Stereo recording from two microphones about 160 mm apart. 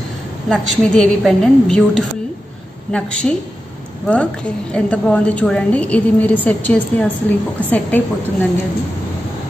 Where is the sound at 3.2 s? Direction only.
10° left (ahead or behind).